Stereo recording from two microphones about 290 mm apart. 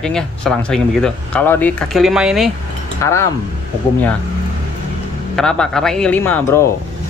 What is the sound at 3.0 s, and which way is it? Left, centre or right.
Speech, centre.